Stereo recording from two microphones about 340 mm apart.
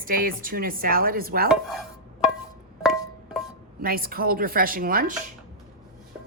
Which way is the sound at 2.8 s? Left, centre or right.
Centre.